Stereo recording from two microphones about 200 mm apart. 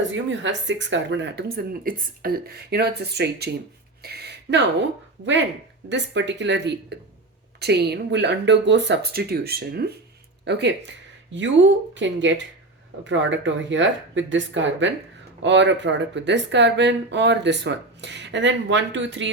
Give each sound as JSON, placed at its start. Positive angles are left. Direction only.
{"t": 0.1, "sound": "speech", "side_deg": -65}
{"t": 4.0, "sound": "a sound", "side_deg": -55}
{"t": 5.2, "sound": "speech", "side_deg": -65}
{"t": 11.9, "sound": "speech", "side_deg": -65}